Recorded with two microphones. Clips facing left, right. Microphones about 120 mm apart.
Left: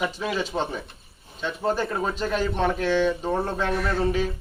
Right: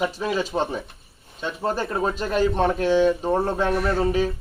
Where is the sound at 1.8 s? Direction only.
10° right (ahead or behind).